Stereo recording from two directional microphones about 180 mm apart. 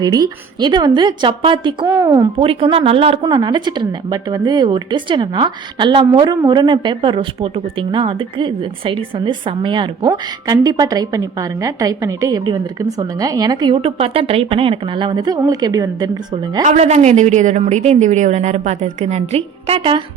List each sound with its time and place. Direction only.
0.0 s a woman's voice: 25° right (ahead or behind)
1.9 s a woman's voice: 15° right (ahead or behind)
2.3 s a woman's voice: 30° right (ahead or behind)
16.6 s a woman's voice: 40° right (ahead or behind)